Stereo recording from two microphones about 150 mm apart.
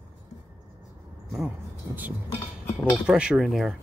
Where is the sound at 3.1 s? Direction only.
5° right (ahead or behind).